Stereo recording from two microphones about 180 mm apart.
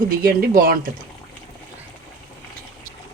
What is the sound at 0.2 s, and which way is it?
Speech, 55° right (ahead or behind).